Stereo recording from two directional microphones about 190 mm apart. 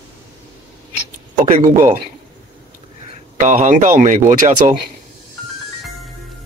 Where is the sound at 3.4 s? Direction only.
40° right (ahead or behind).